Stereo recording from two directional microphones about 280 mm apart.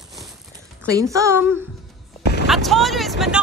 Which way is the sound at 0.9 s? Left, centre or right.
Centre.